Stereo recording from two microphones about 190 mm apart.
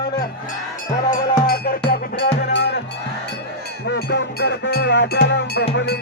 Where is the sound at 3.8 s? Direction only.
65° left (ahead or behind).